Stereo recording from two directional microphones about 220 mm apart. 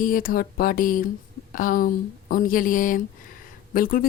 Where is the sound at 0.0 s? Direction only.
40° left (ahead or behind).